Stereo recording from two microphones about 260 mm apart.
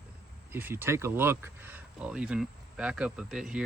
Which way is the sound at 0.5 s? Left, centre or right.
Centre.